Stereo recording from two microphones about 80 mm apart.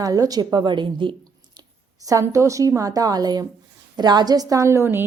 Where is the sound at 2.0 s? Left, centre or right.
Right.